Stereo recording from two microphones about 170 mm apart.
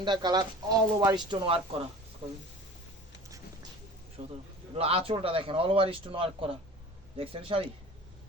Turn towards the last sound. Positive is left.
turn(degrees=-30)  # may be behind; listen again after turning